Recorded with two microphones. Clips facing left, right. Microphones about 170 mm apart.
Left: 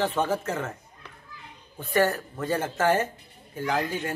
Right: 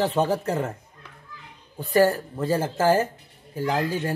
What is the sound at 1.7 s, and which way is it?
A man's voice, 35° right (ahead or behind).